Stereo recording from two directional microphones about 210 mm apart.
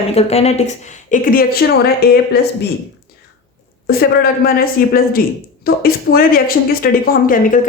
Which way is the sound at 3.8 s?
45° left (ahead or behind).